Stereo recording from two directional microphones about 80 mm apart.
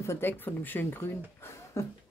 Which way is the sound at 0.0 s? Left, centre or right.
Left.